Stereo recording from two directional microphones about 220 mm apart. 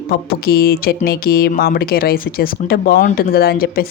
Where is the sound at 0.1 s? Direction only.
45° left (ahead or behind).